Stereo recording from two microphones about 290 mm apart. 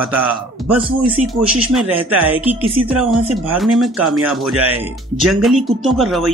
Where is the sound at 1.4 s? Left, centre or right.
Centre.